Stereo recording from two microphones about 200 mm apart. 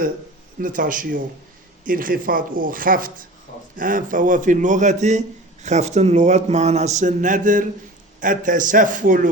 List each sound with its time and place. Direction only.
0.6 s a man's voice: 45° right (ahead or behind)